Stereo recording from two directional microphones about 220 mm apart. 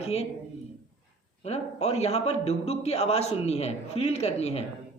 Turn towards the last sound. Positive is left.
turn(degrees=30)  # may be behind; listen again after turning